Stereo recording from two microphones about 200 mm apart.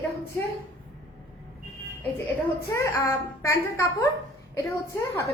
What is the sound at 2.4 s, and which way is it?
Speech, 10° left (ahead or behind).